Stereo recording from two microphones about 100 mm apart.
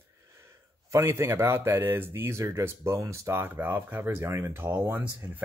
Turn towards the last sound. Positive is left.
turn(degrees=-15)  # may be behind; listen again after turning